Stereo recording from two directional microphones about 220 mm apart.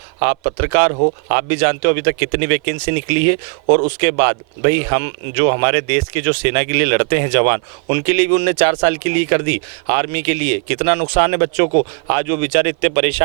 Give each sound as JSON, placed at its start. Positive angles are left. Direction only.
{"t": 0.2, "sound": "speech", "side_deg": -15}
{"t": 3.7, "sound": "speech", "side_deg": -40}
{"t": 4.0, "sound": "speech", "side_deg": -15}